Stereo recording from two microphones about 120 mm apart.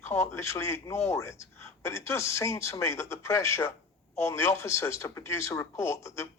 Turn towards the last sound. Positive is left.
turn(degrees=25)  # may be behind; listen again after turning